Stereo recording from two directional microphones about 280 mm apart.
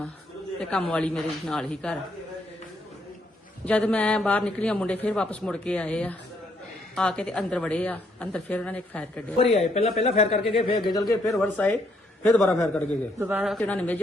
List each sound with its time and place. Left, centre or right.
0.6 s a man's voice: centre
3.7 s a man's voice: centre
9.4 s a man's voice: left; by 14.0 s centre